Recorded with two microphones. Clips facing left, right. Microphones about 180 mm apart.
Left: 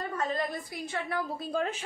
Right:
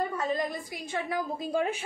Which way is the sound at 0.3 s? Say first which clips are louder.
Right 2 dB; 15° right (ahead or behind).